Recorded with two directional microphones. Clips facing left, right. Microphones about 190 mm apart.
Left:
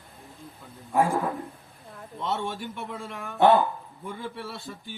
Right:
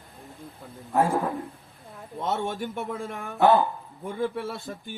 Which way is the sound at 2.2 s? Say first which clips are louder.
Right 2 dB; 50° right (ahead or behind).